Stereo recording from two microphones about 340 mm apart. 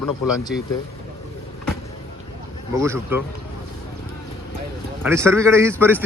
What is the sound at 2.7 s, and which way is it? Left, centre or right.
Speech, centre.